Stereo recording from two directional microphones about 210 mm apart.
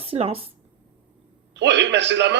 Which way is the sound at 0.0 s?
25° right (ahead or behind).